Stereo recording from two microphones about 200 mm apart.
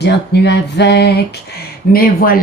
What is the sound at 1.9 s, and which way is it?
Speech, 45° left (ahead or behind).